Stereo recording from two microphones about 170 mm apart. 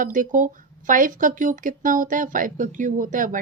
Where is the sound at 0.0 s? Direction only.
50° right (ahead or behind).